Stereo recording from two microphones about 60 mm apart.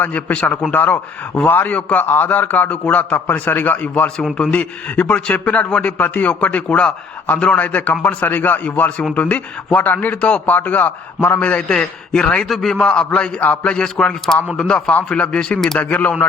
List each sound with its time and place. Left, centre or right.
0.0 s a man's voice: left; by 15.8 s centre
15.8 s a man's voice: left